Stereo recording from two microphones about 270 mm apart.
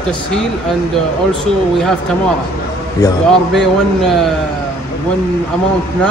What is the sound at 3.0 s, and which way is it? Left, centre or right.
Speech, centre.